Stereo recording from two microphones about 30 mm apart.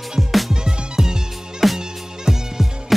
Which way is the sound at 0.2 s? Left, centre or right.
Centre.